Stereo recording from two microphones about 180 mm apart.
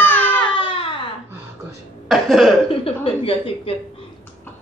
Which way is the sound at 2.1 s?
Centre (ahead or behind).